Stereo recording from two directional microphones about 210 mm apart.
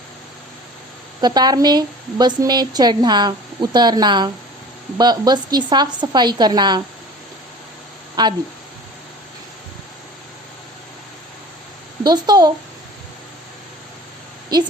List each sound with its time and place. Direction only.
1.2 s a woman's voice: 20° right (ahead or behind)
8.2 s a woman's voice: 20° right (ahead or behind)
12.0 s a woman's voice: 20° right (ahead or behind)
14.5 s a woman's voice: 20° right (ahead or behind)